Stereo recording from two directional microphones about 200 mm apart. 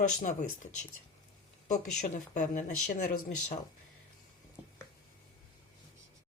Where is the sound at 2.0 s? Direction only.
40° left (ahead or behind).